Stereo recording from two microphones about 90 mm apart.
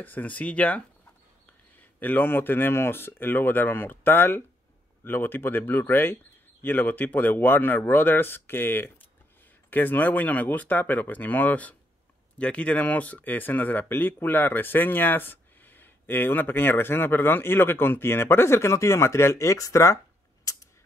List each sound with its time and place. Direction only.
0.0 s speech: 20° left (ahead or behind)
2.0 s speech: 20° left (ahead or behind)
20.5 s a sound: 40° left (ahead or behind)